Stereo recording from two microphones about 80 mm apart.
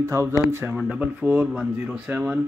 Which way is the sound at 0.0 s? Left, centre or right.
Right.